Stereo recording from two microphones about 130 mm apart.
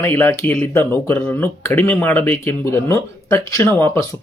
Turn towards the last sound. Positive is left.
turn(degrees=20)  # may be behind; listen again after turning